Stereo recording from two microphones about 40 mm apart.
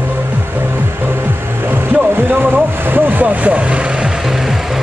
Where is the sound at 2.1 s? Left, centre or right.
Right.